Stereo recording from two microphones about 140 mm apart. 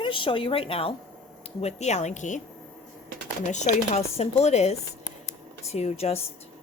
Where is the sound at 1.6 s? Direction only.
55° left (ahead or behind).